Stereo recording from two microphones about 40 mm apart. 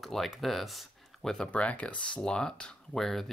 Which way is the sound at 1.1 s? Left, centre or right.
Centre.